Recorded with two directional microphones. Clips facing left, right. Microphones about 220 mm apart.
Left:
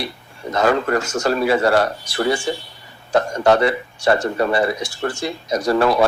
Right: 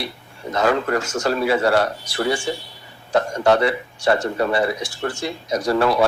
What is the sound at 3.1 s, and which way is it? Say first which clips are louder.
Speech: left 2 dB; 45° left (ahead or behind).